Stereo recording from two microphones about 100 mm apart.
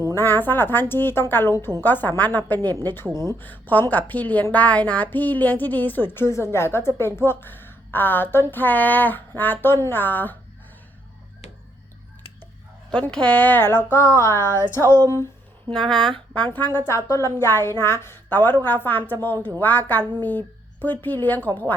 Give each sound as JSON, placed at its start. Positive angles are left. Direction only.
{"t": 0.0, "sound": "a woman's voice", "side_deg": 25}
{"t": 3.2, "sound": "a woman's voice", "side_deg": 30}
{"t": 3.4, "sound": "a woman's voice", "side_deg": 20}
{"t": 12.9, "sound": "a woman's voice", "side_deg": 10}
{"t": 15.7, "sound": "a woman's voice", "side_deg": 5}